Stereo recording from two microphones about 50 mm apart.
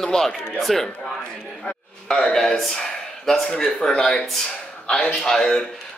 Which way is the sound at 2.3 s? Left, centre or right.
Centre.